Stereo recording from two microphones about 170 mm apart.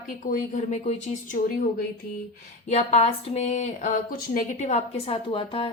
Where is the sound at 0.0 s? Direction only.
55° left (ahead or behind).